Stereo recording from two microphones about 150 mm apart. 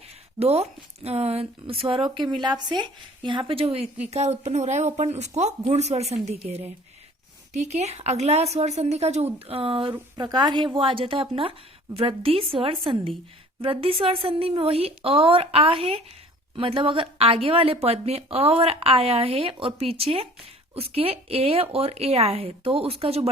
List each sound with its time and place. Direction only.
0.3 s a woman's voice: 45° right (ahead or behind)
7.5 s a woman's voice: 50° right (ahead or behind)